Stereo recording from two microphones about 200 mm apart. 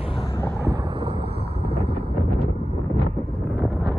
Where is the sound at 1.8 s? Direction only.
55° right (ahead or behind).